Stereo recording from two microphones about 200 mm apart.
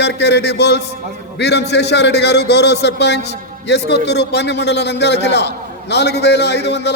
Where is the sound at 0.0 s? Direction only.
55° left (ahead or behind).